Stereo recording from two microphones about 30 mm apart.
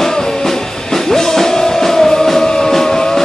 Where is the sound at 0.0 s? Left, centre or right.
Centre.